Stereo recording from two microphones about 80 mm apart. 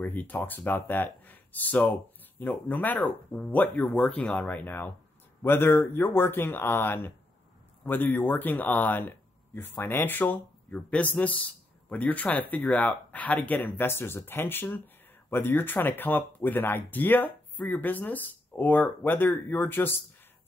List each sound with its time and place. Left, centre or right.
0.0 s speech: left